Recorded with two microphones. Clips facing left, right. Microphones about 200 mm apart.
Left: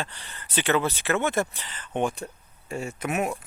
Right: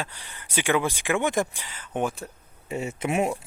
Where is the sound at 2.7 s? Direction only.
20° right (ahead or behind).